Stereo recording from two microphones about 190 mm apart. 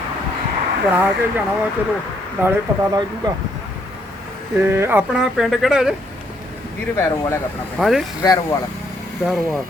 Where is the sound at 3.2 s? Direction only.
20° right (ahead or behind).